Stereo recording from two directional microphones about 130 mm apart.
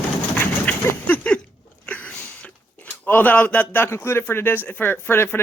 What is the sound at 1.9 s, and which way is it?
Speech, 10° left (ahead or behind).